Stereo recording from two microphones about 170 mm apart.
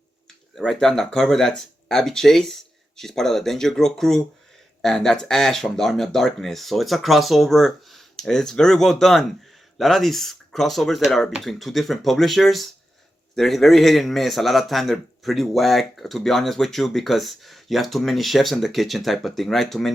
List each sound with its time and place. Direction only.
0.5 s a man's voice: 5° left (ahead or behind)